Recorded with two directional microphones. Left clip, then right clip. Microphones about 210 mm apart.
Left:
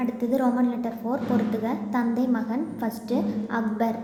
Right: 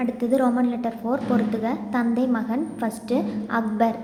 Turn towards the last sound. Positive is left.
turn(degrees=-15)  # may be behind; listen again after turning